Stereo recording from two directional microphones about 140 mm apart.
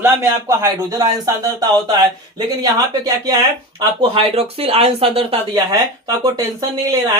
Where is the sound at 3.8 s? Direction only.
35° right (ahead or behind).